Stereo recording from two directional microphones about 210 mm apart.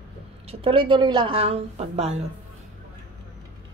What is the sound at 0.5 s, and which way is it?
A woman's voice, 25° right (ahead or behind).